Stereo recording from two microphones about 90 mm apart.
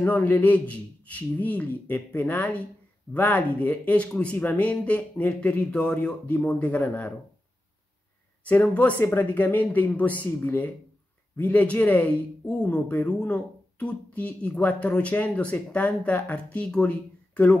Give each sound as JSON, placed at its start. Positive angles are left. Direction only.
{"t": 0.0, "sound": "speech", "side_deg": 20}
{"t": 8.7, "sound": "speech", "side_deg": 15}